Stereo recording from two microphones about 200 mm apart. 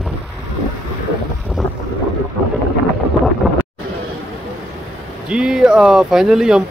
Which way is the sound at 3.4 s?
Centre (ahead or behind).